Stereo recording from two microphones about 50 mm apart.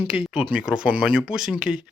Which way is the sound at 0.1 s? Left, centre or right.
Right.